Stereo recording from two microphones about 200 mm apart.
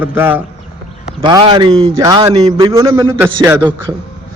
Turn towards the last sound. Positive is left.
turn(degrees=-10)  # may be behind; listen again after turning